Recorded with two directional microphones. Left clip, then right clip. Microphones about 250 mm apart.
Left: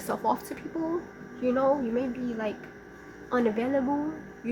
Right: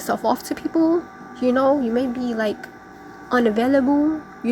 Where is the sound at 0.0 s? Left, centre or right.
Centre.